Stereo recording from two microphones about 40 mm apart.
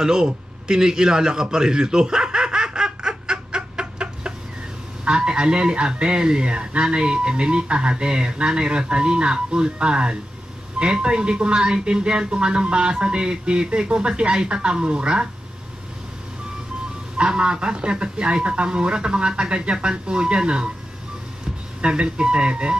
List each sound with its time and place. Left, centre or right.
0.0 s a sound: centre
5.0 s a man's voice: right
17.2 s a man's voice: right
21.8 s a man's voice: right